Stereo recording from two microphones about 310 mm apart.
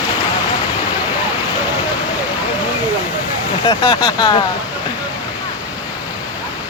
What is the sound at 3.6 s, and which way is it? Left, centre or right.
Speech, centre.